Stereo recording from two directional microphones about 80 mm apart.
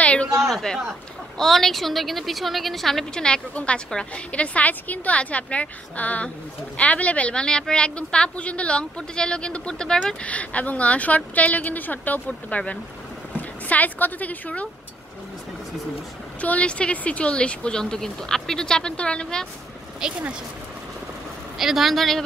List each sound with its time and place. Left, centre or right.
0.0 s a sound: centre
0.4 s a man's voice: centre
16.3 s speech: centre
20.0 s speech: centre
21.5 s a woman's voice: centre